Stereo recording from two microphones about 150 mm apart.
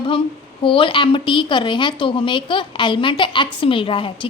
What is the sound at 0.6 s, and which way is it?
A woman's voice, 35° left (ahead or behind).